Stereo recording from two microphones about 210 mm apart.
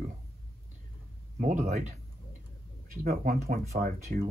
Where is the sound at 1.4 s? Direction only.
35° right (ahead or behind).